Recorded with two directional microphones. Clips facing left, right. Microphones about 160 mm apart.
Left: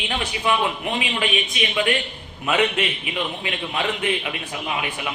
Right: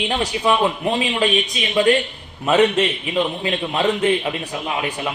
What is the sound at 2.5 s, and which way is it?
A man's voice, 40° right (ahead or behind).